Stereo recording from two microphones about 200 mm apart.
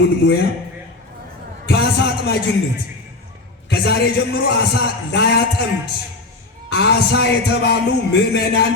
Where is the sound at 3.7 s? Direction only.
55° left (ahead or behind).